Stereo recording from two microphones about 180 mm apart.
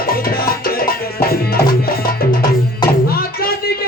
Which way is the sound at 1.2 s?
55° left (ahead or behind).